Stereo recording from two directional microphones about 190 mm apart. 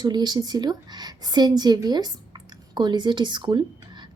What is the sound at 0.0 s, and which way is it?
A woman's voice, 20° right (ahead or behind).